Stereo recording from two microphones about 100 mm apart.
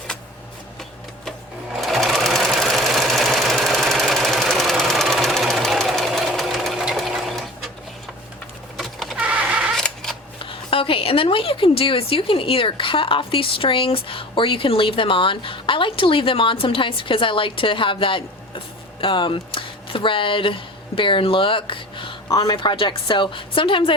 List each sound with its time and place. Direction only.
1.8 s sewing machine: centre (ahead or behind)
8.8 s power windows: centre (ahead or behind)
9.1 s vehicle: 15° right (ahead or behind)
9.7 s a sound: 5° left (ahead or behind)
10.4 s a woman's voice: 65° left (ahead or behind)
22.3 s a woman's voice: 40° left (ahead or behind); by 23.9 s 60° left (ahead or behind)